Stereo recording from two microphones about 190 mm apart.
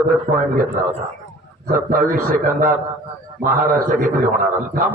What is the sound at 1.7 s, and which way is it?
A man's voice, 45° right (ahead or behind).